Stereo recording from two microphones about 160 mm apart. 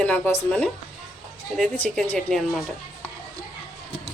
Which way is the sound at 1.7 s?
10° left (ahead or behind).